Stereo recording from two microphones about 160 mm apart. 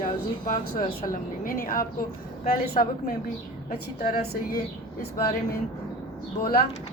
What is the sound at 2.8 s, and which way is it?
Speech, 40° left (ahead or behind).